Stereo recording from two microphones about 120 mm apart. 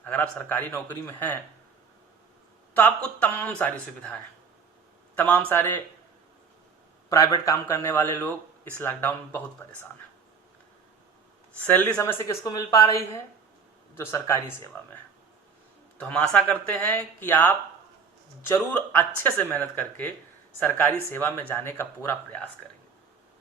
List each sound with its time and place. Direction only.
0.0 s speech: 15° left (ahead or behind)
2.7 s a man's voice: 10° left (ahead or behind)
7.1 s speech: 30° left (ahead or behind)
7.7 s speech: 20° left (ahead or behind)
11.6 s speech: 15° left (ahead or behind)
16.0 s speech: 10° left (ahead or behind)